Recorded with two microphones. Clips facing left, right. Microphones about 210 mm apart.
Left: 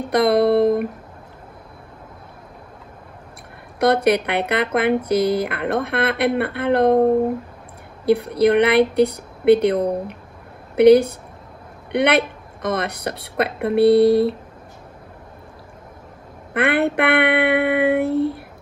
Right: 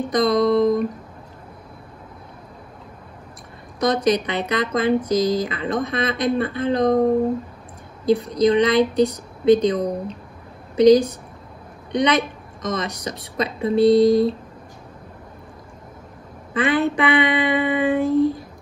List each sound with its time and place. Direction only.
0.1 s speech: 60° left (ahead or behind)
3.8 s speech: 60° left (ahead or behind)
16.5 s speech: 60° left (ahead or behind)